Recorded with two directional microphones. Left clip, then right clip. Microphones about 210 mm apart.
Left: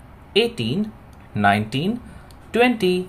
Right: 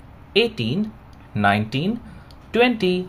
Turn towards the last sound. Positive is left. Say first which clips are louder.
# even
turn(degrees=-5)  # may be behind; listen again after turning